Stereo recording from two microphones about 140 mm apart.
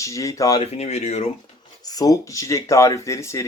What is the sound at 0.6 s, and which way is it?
Speech, 50° left (ahead or behind).